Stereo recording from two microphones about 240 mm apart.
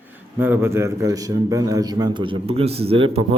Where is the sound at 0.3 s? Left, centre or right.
Centre.